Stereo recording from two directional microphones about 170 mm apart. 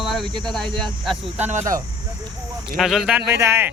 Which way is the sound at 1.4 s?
45° right (ahead or behind).